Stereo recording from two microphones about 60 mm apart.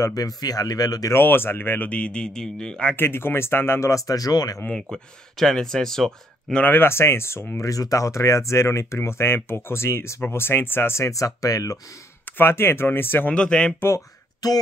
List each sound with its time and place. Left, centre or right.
0.0 s speech: left
1.1 s speech: left
1.9 s speech: centre
3.0 s speech: left
3.9 s speech: left
4.9 s speech: centre
6.6 s speech: left
7.6 s speech: left
11.1 s speech: left
12.4 s speech: left
13.3 s speech: centre
13.7 s speech: left
14.4 s speech: left